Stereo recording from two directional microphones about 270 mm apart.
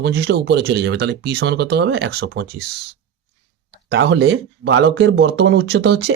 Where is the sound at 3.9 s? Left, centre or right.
Right.